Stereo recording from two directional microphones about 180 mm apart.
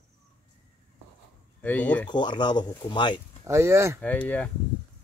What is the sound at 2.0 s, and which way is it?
Speech, 25° left (ahead or behind).